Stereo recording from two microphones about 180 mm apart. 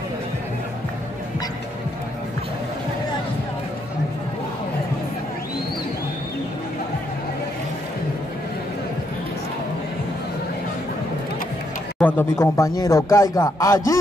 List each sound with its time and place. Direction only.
12.0 s a man's voice: 10° left (ahead or behind)